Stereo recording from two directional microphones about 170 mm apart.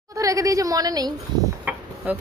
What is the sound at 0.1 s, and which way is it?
A woman's voice, 20° right (ahead or behind).